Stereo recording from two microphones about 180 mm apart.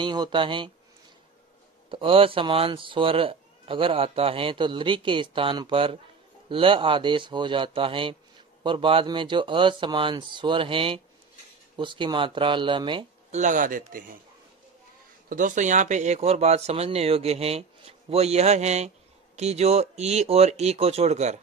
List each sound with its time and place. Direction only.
0.0 s speech: 25° right (ahead or behind)
1.9 s speech: 30° right (ahead or behind)
13.3 s speech: 45° right (ahead or behind)
15.2 s speech: 45° right (ahead or behind)